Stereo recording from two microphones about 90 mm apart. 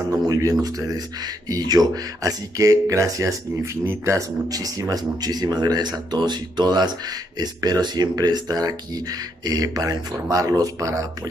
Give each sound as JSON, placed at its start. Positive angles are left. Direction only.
{"t": 0.3, "sound": "speech", "side_deg": -40}
{"t": 4.5, "sound": "speech", "side_deg": -45}